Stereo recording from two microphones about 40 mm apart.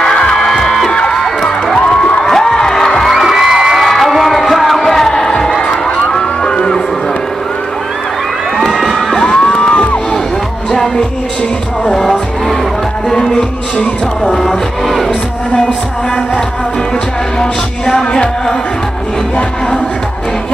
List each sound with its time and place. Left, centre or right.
0.0 s music: centre
3.1 s music: centre
8.5 s crowd: centre
11.8 s music: centre
14.2 s music: centre
17.4 s music: centre